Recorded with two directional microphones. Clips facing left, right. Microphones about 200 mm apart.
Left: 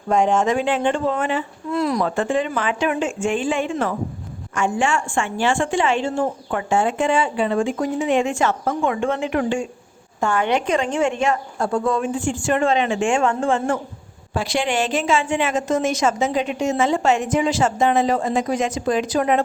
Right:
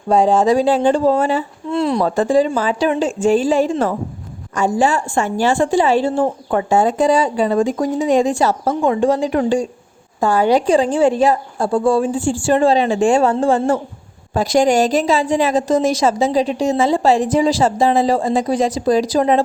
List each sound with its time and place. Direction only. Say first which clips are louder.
0.1 s a woman's voice: right 5 dB; 35° right (ahead or behind)